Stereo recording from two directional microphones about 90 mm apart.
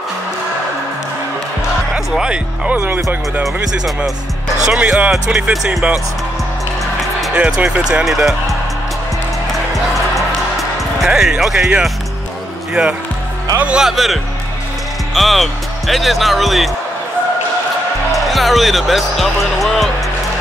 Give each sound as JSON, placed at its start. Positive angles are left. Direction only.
{"t": 2.0, "sound": "speech", "side_deg": -5}
{"t": 4.7, "sound": "speech", "side_deg": -15}
{"t": 5.1, "sound": "speech", "side_deg": -5}
{"t": 7.3, "sound": "speech", "side_deg": -15}
{"t": 11.1, "sound": "speech", "side_deg": -5}
{"t": 13.6, "sound": "speech", "side_deg": -10}
{"t": 18.1, "sound": "speech", "side_deg": 0}